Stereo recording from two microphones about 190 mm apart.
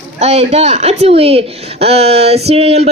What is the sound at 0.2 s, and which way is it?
Speech, 35° right (ahead or behind).